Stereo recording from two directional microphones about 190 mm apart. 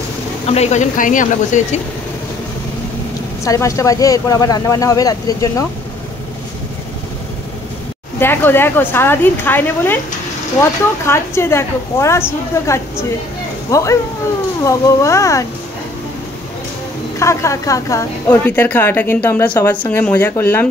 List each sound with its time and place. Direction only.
0.5 s speech: 35° left (ahead or behind)
3.4 s a woman's voice: 15° left (ahead or behind)
8.2 s a woman's voice: 10° left (ahead or behind)
17.2 s a woman's voice: 15° left (ahead or behind)